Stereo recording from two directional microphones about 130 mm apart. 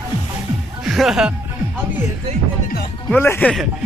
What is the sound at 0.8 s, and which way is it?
Music, 5° right (ahead or behind).